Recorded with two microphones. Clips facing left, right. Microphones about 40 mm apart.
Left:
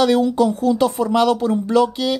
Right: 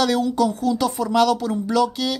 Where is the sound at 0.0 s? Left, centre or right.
Left.